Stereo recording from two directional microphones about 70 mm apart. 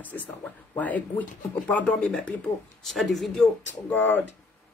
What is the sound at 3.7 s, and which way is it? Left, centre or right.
Speech, left.